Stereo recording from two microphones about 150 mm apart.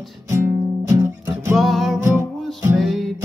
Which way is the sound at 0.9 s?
15° right (ahead or behind).